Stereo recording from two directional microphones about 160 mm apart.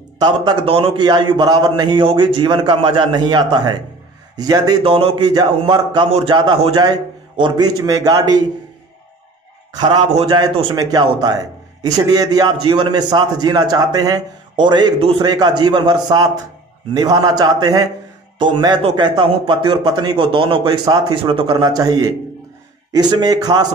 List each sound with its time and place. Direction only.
0.2 s a man's voice: 30° right (ahead or behind)
4.8 s a man's voice: 35° right (ahead or behind)
10.1 s a man's voice: 30° right (ahead or behind)